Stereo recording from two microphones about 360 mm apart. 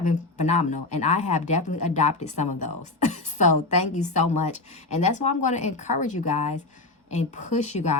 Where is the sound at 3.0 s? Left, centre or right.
Centre.